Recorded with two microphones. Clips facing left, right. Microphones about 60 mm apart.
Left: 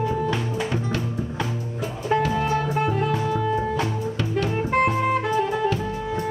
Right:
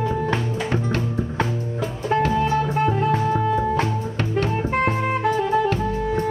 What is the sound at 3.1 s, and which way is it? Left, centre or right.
Music, right.